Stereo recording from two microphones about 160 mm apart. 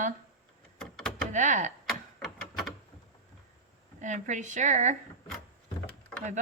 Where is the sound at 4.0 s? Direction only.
50° right (ahead or behind).